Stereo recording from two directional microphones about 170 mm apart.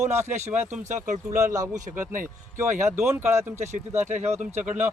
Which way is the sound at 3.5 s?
45° right (ahead or behind).